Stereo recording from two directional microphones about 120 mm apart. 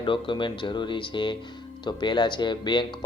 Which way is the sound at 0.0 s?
45° left (ahead or behind).